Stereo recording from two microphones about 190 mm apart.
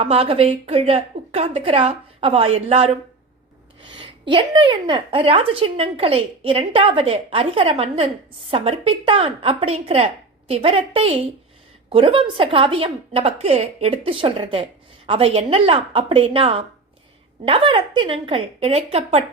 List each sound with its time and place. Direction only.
0.0 s a woman's voice: 30° right (ahead or behind)